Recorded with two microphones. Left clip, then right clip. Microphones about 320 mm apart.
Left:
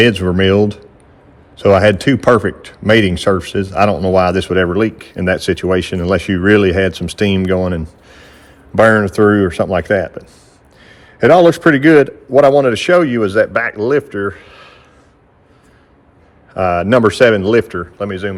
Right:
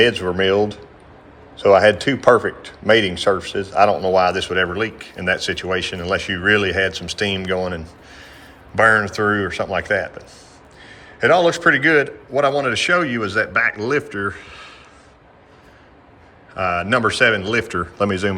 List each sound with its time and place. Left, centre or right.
0.0 s a man's voice: left; by 14.8 s centre
16.6 s speech: centre